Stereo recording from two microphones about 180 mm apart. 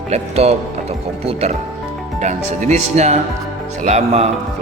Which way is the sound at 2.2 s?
40° right (ahead or behind).